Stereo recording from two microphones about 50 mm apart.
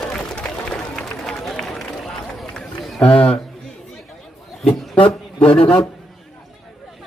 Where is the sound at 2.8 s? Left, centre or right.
Centre.